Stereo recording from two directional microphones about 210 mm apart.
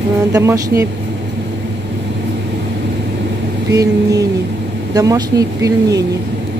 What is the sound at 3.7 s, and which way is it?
Speech, 15° right (ahead or behind).